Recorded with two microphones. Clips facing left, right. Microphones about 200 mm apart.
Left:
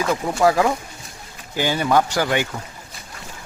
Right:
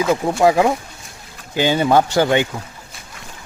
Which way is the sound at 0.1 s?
25° right (ahead or behind).